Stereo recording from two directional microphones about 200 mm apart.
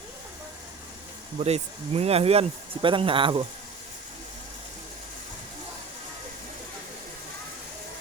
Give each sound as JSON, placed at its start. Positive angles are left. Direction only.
{"t": 1.4, "sound": "speech", "side_deg": -30}